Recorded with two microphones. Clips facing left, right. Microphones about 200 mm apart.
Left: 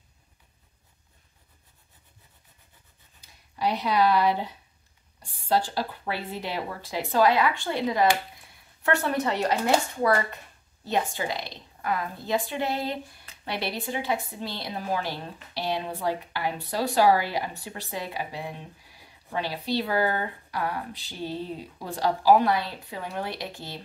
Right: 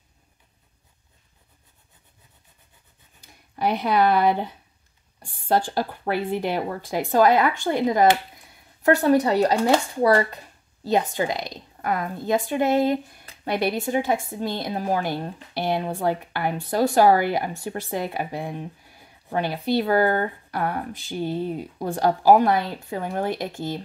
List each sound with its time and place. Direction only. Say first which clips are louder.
3.2 s a woman's voice: right 3 dB; 55° right (ahead or behind)